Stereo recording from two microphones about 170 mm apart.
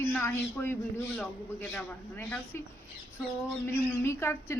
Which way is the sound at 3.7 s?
15° left (ahead or behind).